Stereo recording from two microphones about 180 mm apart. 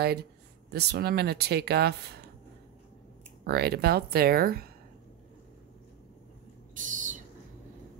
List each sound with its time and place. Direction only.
0.0 s speech: 60° right (ahead or behind)
3.4 s speech: 60° right (ahead or behind)
6.7 s owl: 45° right (ahead or behind)